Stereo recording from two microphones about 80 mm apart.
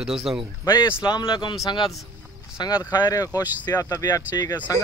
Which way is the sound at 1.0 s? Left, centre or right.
Left.